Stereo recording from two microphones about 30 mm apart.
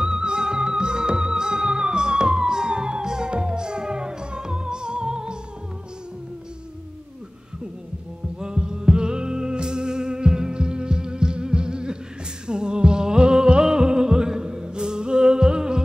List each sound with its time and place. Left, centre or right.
0.0 s music: right
8.4 s music: right